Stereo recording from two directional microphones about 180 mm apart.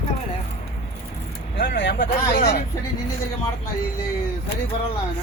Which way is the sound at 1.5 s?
70° left (ahead or behind).